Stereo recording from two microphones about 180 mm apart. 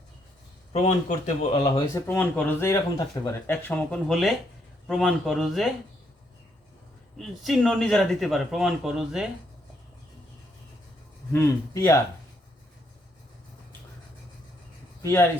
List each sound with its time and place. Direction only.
0.7 s speech: 40° left (ahead or behind)
1.9 s a man's voice: 15° left (ahead or behind)
7.2 s a man's voice: centre (ahead or behind)
11.3 s speech: 15° left (ahead or behind)
15.0 s speech: 15° left (ahead or behind)